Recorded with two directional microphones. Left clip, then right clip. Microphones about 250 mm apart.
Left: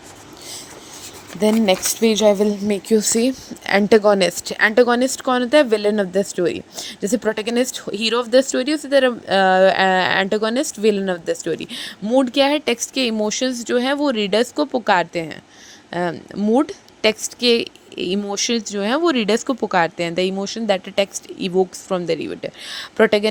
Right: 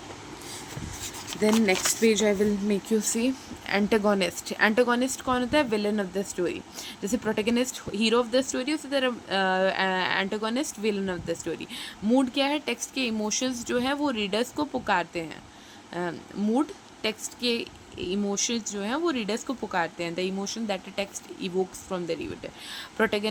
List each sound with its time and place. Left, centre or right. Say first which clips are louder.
1.4 s speech: left 7 dB; left